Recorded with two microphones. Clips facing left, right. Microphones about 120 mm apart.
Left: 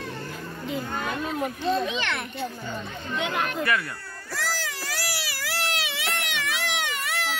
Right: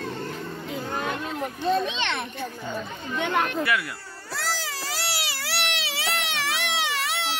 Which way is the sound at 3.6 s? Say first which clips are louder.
Even; 5° right (ahead or behind).